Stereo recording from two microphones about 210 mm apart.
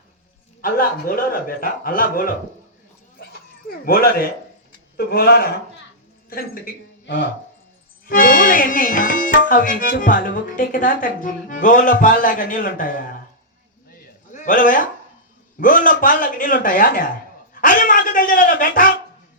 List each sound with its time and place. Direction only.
0.6 s a man's voice: 45° left (ahead or behind)
3.7 s a man's voice: 45° left (ahead or behind)
14.3 s speech: 40° left (ahead or behind)